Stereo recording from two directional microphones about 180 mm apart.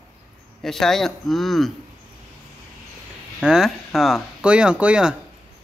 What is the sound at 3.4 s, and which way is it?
A man's voice, 5° right (ahead or behind).